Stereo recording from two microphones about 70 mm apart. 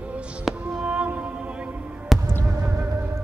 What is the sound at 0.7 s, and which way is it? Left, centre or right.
Music, centre.